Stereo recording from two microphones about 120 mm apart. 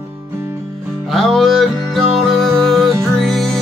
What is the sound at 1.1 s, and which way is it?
Music, centre (ahead or behind).